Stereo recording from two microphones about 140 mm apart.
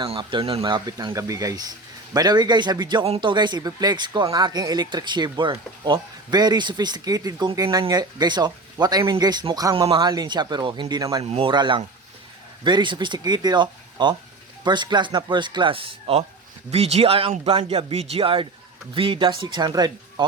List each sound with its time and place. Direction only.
0.0 s speech: 35° right (ahead or behind)
0.6 s speech: 25° right (ahead or behind)
11.2 s speech: 45° right (ahead or behind)